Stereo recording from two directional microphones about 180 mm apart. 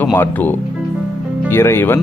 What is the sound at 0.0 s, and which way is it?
A man's voice, 10° left (ahead or behind).